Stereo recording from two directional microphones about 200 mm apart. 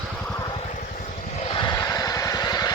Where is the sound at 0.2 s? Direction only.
5° left (ahead or behind).